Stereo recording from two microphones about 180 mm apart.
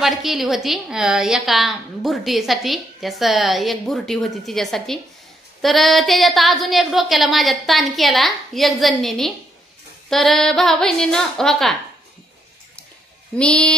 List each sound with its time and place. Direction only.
0.0 s a woman's voice: centre (ahead or behind)
13.4 s a woman's voice: 5° left (ahead or behind)